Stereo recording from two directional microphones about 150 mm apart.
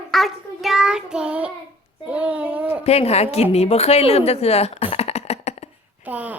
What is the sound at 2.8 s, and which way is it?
Speech, 45° left (ahead or behind).